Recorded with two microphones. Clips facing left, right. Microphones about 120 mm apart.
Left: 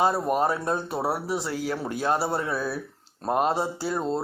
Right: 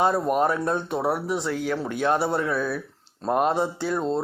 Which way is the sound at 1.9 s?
35° left (ahead or behind).